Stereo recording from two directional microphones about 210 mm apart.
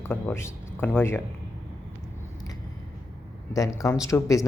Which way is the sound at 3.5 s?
15° left (ahead or behind).